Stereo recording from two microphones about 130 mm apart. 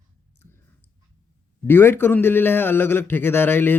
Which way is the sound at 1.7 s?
15° left (ahead or behind).